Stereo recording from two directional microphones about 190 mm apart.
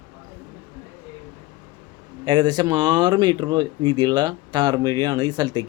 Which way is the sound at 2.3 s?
20° right (ahead or behind).